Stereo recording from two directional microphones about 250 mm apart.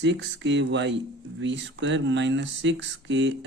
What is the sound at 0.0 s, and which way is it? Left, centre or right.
Speech, right.